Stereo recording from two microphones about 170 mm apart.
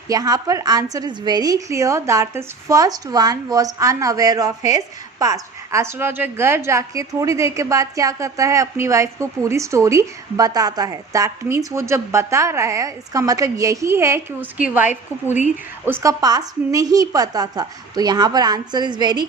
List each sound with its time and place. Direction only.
0.1 s a woman's voice: 20° right (ahead or behind)